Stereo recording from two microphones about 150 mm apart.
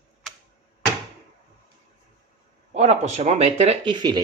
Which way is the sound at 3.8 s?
30° right (ahead or behind).